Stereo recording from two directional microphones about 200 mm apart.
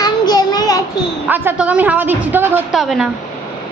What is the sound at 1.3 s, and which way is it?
A woman's voice, 10° right (ahead or behind).